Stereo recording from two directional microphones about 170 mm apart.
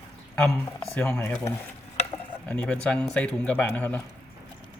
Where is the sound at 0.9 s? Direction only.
15° left (ahead or behind).